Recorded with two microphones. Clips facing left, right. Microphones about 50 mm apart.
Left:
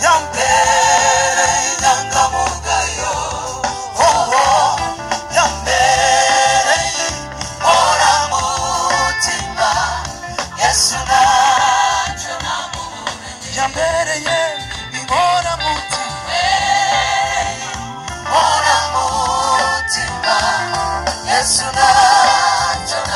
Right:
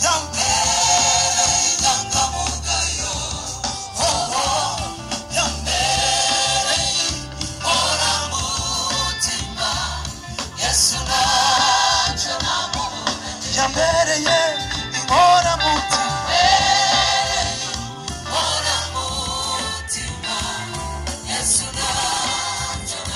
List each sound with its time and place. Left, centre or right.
0.0 s music: left
18.3 s music: left